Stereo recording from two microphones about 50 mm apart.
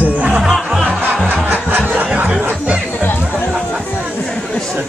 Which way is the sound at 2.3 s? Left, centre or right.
Right.